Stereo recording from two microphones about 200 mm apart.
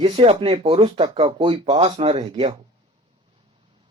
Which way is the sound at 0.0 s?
30° right (ahead or behind).